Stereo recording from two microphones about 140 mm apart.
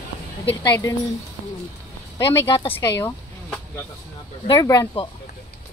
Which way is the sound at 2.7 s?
15° left (ahead or behind).